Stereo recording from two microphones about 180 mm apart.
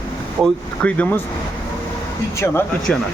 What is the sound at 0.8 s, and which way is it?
Speech, 10° left (ahead or behind).